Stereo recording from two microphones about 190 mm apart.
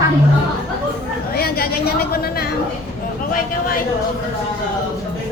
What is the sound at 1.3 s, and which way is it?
A woman's voice, 55° left (ahead or behind).